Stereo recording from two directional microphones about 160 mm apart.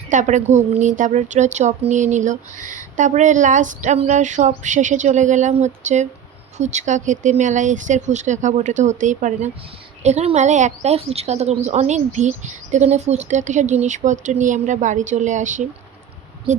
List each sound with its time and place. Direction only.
0.1 s a woman's voice: 50° right (ahead or behind)